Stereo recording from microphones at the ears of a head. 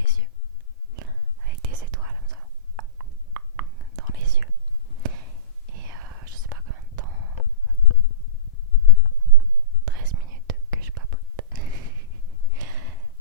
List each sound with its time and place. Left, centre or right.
0.9 s whispering: right
7.8 s a sound: left
9.8 s whispering: right